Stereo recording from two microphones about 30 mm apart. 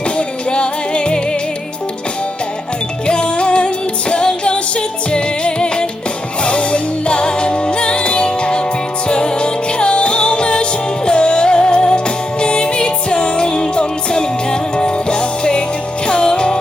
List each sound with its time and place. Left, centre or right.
0.2 s music: left
3.1 s music: left